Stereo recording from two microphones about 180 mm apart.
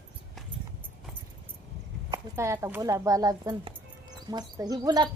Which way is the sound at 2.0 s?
15° right (ahead or behind).